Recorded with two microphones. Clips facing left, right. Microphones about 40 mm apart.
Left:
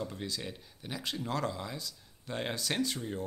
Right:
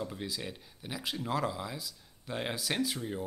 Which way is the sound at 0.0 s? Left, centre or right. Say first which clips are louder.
Even; centre.